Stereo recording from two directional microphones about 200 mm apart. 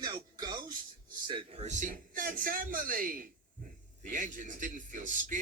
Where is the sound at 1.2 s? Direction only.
25° right (ahead or behind).